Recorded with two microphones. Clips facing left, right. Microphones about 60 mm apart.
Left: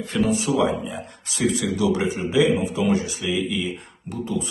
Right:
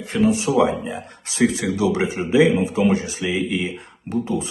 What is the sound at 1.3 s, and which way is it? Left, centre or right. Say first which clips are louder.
Speech: right 3 dB; right.